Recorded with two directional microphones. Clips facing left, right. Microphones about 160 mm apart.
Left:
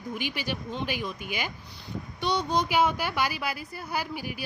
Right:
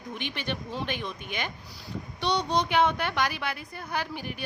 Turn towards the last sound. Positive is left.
turn(degrees=5)  # may be behind; listen again after turning